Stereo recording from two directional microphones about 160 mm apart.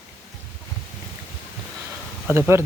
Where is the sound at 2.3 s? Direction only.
15° right (ahead or behind).